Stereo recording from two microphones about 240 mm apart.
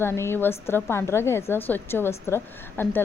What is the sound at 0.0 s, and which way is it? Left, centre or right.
A woman's voice, centre.